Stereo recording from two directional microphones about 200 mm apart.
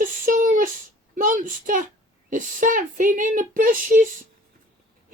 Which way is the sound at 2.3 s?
40° right (ahead or behind).